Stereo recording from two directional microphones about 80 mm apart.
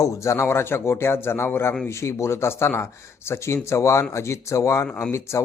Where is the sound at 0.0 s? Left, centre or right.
Left.